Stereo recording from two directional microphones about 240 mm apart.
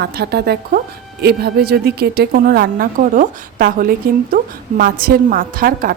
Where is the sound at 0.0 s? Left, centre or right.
Right.